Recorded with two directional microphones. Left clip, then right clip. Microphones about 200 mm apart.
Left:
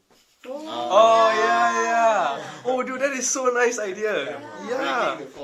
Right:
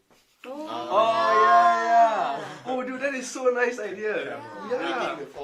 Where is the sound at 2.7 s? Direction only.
45° left (ahead or behind).